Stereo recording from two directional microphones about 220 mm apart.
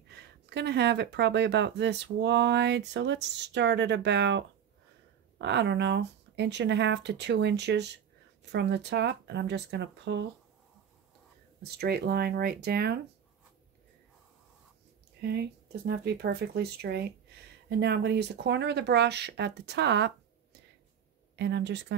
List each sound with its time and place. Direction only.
0.1 s speech: 50° right (ahead or behind)
11.6 s speech: 45° right (ahead or behind)
15.2 s speech: 45° right (ahead or behind)
21.4 s speech: 50° right (ahead or behind)